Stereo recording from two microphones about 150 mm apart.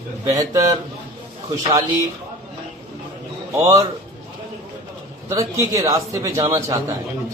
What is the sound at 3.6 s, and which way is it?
Speech, 20° right (ahead or behind).